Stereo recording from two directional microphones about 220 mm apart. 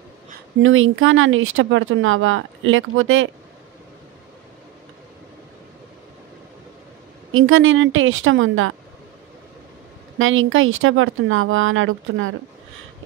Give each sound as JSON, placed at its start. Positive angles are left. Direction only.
{"t": 0.6, "sound": "speech", "side_deg": -65}
{"t": 7.3, "sound": "speech", "side_deg": -65}
{"t": 10.1, "sound": "speech", "side_deg": -65}